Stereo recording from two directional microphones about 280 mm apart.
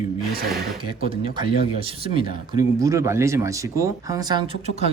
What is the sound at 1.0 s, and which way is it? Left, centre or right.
Speech, centre.